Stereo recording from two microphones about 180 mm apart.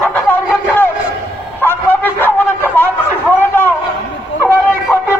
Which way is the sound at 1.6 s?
10° left (ahead or behind).